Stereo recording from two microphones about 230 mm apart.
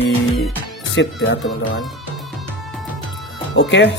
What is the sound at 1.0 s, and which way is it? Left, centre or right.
Speech, left.